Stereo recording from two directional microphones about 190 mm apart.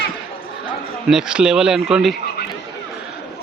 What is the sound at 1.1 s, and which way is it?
Speech, 5° right (ahead or behind).